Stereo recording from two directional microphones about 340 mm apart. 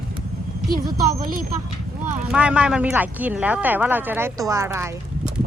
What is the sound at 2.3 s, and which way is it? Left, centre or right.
Speech, centre.